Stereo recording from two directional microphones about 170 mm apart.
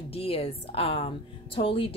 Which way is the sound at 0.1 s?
35° left (ahead or behind).